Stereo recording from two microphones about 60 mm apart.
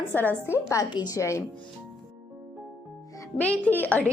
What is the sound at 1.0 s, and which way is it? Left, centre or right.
Speech, left.